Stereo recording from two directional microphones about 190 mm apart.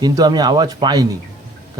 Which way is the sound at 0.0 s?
20° right (ahead or behind).